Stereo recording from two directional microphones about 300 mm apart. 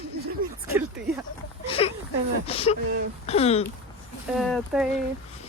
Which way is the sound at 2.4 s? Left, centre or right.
Centre.